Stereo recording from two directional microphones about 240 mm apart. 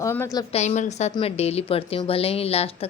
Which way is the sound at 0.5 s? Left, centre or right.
Left.